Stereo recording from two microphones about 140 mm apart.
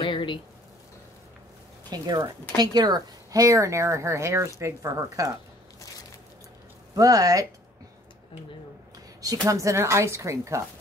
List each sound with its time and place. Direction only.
0.0 s a sound: 35° left (ahead or behind)
1.9 s speech: 30° right (ahead or behind)
7.0 s speech: 25° right (ahead or behind)
9.5 s speech: 20° right (ahead or behind)